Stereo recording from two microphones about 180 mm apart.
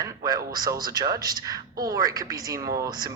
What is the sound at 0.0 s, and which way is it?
Speech, 20° right (ahead or behind).